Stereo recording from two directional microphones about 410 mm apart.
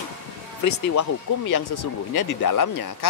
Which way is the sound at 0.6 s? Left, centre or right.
Left.